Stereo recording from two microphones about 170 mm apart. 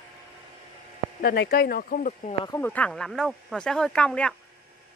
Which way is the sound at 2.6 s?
10° left (ahead or behind).